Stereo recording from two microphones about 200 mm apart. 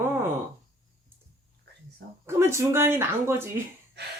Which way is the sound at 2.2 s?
15° right (ahead or behind).